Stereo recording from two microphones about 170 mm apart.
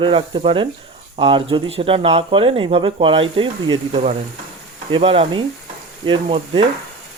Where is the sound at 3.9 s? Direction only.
40° right (ahead or behind).